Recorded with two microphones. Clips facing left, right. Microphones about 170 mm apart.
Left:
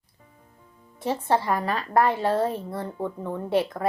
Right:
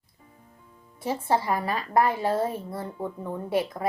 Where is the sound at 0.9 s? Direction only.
10° right (ahead or behind).